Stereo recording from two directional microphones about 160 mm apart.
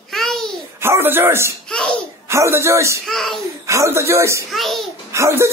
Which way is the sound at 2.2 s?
15° right (ahead or behind).